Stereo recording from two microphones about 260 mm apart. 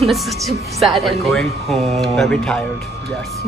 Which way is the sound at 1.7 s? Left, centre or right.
Right.